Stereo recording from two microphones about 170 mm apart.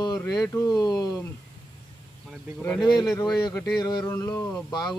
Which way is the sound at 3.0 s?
25° left (ahead or behind).